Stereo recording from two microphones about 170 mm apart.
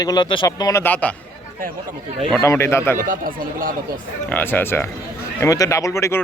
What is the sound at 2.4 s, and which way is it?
Speech, 15° left (ahead or behind).